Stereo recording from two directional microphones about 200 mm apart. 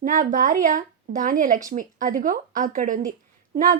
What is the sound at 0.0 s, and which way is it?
Speech, 40° right (ahead or behind).